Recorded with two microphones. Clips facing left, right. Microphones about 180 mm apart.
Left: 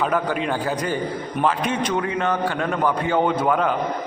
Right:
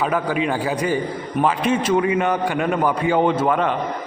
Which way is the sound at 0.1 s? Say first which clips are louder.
Right 1 dB; 5° right (ahead or behind).